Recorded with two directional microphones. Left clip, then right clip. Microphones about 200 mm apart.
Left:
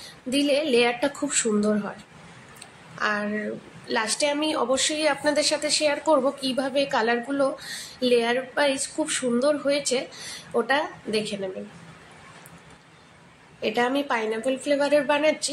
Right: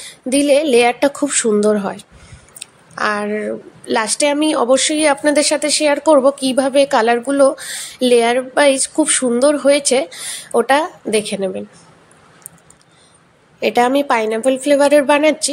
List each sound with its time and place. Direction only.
0.3 s a woman's voice: 40° right (ahead or behind)
3.0 s a woman's voice: 40° right (ahead or behind)
13.6 s a woman's voice: 45° right (ahead or behind)